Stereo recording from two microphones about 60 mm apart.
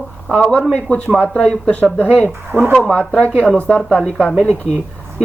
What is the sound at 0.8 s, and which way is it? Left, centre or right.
Speech, left.